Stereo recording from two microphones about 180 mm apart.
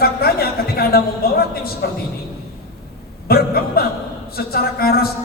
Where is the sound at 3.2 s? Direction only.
60° left (ahead or behind).